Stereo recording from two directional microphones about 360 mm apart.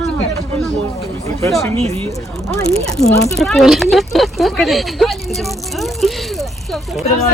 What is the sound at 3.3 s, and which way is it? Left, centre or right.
Speech, centre.